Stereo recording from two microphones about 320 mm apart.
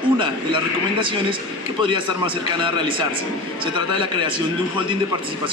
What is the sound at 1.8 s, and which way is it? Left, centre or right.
Speech, centre.